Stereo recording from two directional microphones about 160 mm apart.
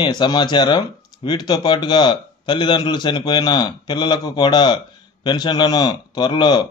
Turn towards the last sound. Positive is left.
turn(degrees=25)  # may be behind; listen again after turning